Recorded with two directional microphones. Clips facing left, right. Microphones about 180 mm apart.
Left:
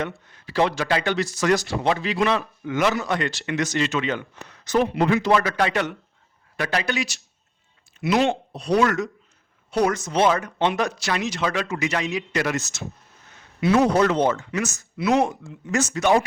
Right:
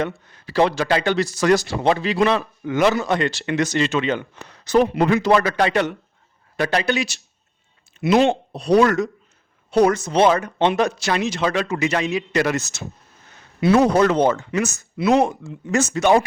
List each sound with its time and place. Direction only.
0.0 s speech: 35° right (ahead or behind)